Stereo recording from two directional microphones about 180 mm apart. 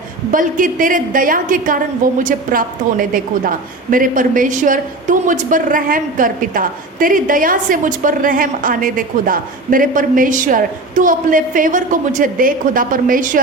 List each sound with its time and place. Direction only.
0.3 s a woman's voice: 50° right (ahead or behind)